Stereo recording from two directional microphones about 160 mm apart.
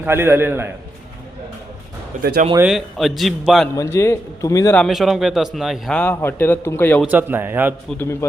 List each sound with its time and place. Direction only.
0.0 s speech: 15° right (ahead or behind)
2.6 s speech: centre (ahead or behind)
3.8 s a man's voice: 15° left (ahead or behind)
4.8 s speech: centre (ahead or behind)
6.0 s a man's voice: 15° left (ahead or behind)
7.0 s speech: 10° right (ahead or behind)
7.9 s a man's voice: 15° left (ahead or behind)